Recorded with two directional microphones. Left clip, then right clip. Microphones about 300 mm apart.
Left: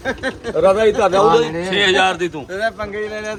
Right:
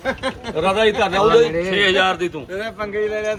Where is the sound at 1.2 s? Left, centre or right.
Centre.